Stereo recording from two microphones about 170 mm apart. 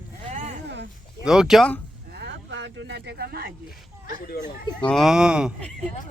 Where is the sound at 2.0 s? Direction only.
80° right.